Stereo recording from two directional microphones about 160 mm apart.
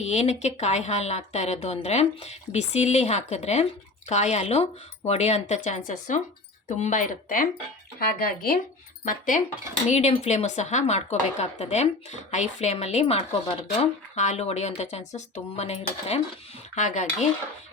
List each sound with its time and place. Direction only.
0.0 s a woman's voice: 45° left (ahead or behind)
7.9 s speech: 65° left (ahead or behind)
9.0 s a woman's voice: 55° left (ahead or behind)